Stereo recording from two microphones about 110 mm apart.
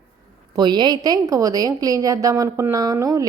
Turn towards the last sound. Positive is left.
turn(degrees=-30)  # may be behind; listen again after turning